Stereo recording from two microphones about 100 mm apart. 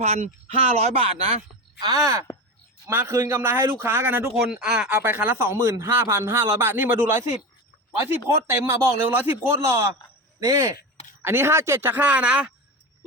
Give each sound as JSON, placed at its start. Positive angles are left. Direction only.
{"t": 0.0, "sound": "speech", "side_deg": -85}
{"t": 1.8, "sound": "speech", "side_deg": -35}
{"t": 4.5, "sound": "speech", "side_deg": -10}
{"t": 4.9, "sound": "speech", "side_deg": -20}
{"t": 8.4, "sound": "speech", "side_deg": -20}
{"t": 11.2, "sound": "speech", "side_deg": -25}